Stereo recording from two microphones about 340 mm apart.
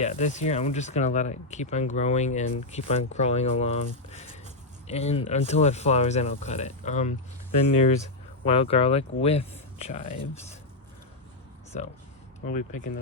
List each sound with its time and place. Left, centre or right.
0.0 s speech: centre
11.7 s speech: left